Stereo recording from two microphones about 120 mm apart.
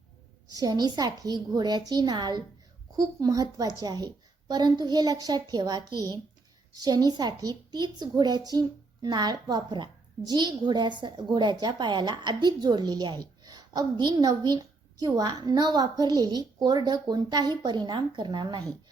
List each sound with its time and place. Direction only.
0.5 s a woman's voice: 35° right (ahead or behind)